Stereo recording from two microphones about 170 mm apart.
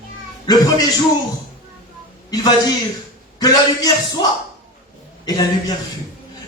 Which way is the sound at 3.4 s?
25° left (ahead or behind).